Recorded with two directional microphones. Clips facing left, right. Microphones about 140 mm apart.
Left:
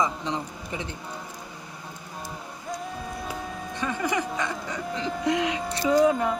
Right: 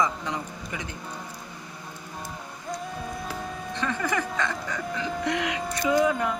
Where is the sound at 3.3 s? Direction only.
15° left (ahead or behind); by 6.2 s 35° left (ahead or behind).